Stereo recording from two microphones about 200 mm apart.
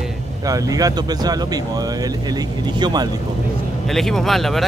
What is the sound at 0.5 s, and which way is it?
Speech, 15° right (ahead or behind).